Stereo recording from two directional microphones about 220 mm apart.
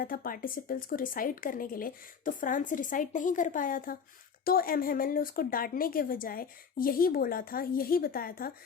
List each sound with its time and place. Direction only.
0.0 s a woman's voice: 40° left (ahead or behind)